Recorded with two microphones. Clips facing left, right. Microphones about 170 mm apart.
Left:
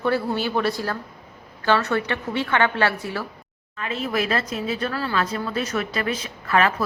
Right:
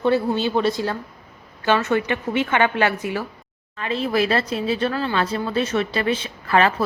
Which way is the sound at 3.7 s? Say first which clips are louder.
Right 4 dB; 30° right (ahead or behind).